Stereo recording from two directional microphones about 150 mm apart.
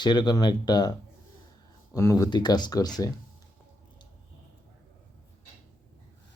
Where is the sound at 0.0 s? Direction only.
30° left (ahead or behind).